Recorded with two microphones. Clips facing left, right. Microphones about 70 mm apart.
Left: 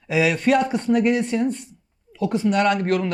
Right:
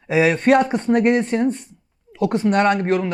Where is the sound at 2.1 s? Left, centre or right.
Right.